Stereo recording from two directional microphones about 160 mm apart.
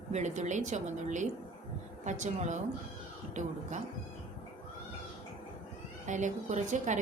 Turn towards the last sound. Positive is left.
turn(degrees=-50)  # may be behind; listen again after turning